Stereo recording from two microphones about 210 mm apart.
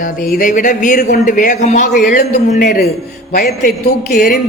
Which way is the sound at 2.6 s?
50° left (ahead or behind).